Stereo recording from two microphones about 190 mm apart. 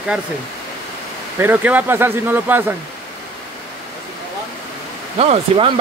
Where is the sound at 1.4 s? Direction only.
10° right (ahead or behind).